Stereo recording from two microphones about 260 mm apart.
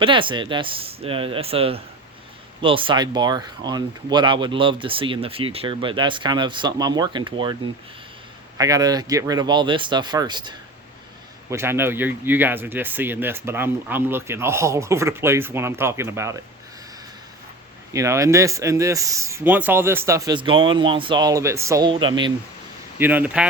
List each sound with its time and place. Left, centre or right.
0.0 s speech: centre
8.5 s speech: centre
17.9 s speech: centre
23.0 s speech: centre